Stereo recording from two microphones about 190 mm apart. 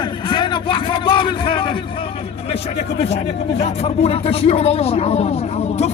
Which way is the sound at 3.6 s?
30° left (ahead or behind).